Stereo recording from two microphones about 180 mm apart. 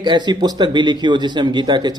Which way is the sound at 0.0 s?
25° right (ahead or behind).